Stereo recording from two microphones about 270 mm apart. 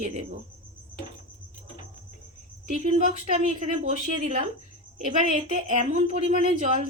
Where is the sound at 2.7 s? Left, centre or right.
Right.